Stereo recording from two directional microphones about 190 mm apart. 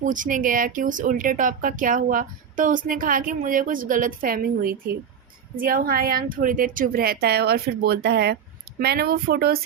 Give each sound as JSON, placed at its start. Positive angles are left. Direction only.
{"t": 0.0, "sound": "speech", "side_deg": -45}